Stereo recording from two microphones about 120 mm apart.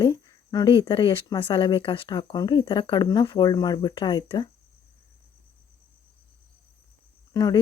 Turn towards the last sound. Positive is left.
turn(degrees=35)  # may be behind; listen again after turning